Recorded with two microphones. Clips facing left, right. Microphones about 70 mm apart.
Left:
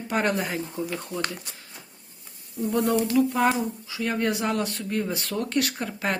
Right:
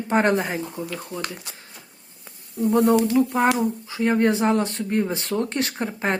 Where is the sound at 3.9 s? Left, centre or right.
Right.